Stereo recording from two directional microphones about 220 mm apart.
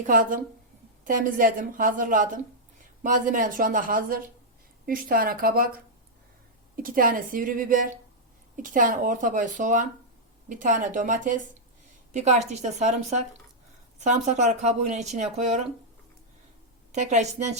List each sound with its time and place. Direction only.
0.0 s speech: 40° right (ahead or behind)
6.8 s speech: 40° right (ahead or behind)
16.9 s speech: 30° right (ahead or behind)